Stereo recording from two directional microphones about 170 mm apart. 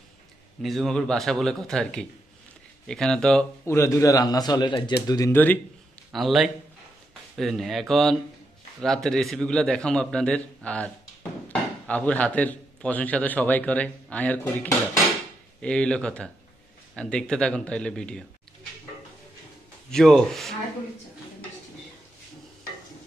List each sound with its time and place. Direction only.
0.6 s a man's voice: centre (ahead or behind)
3.6 s a man's voice: 15° left (ahead or behind)
5.3 s a man's voice: 10° left (ahead or behind)
6.1 s a man's voice: centre (ahead or behind)
11.9 s a man's voice: 10° left (ahead or behind)
19.9 s a man's voice: centre (ahead or behind)